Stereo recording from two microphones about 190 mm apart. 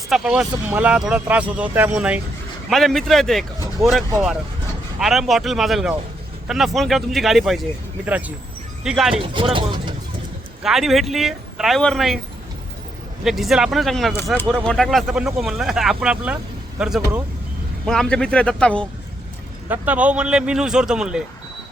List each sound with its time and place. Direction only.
0.1 s speech: 5° right (ahead or behind)
3.8 s speech: 15° right (ahead or behind)
4.9 s speech: centre (ahead or behind)
9.2 s speech: 25° right (ahead or behind)
10.6 s speech: centre (ahead or behind)
13.2 s speech: centre (ahead or behind)
19.6 s speech: 10° right (ahead or behind)